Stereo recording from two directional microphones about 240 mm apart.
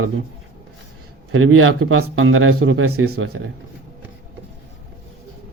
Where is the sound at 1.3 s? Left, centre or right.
Right.